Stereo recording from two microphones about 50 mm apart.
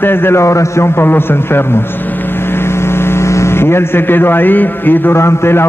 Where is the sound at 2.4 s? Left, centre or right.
Left.